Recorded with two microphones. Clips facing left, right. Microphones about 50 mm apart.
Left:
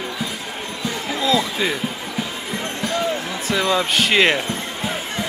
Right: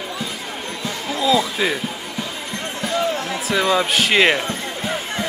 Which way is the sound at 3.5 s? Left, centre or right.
Centre.